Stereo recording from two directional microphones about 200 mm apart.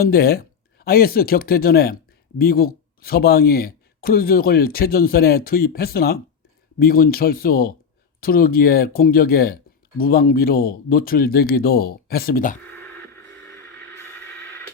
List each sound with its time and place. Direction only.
0.0 s speech: 50° left (ahead or behind)
13.5 s music: 15° left (ahead or behind)